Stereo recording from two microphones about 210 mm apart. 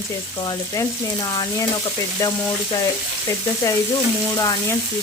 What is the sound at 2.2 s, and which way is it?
Stir, 15° left (ahead or behind).